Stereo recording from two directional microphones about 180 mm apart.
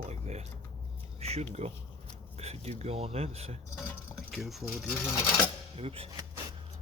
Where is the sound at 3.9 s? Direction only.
Centre (ahead or behind).